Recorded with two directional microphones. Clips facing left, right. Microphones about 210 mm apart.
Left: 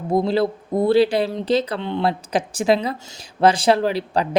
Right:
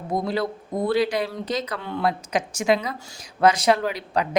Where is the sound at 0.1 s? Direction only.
30° left (ahead or behind).